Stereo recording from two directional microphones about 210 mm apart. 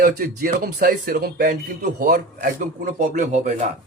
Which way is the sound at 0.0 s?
40° right (ahead or behind).